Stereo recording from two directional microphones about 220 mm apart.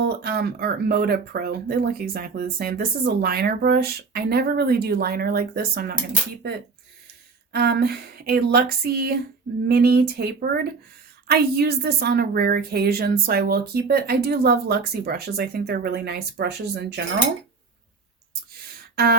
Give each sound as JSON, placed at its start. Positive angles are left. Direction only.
{"t": 0.0, "sound": "speech", "side_deg": -45}
{"t": 7.5, "sound": "speech", "side_deg": -45}